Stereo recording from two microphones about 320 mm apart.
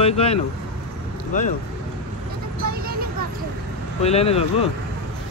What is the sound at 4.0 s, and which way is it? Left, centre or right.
Speech, centre.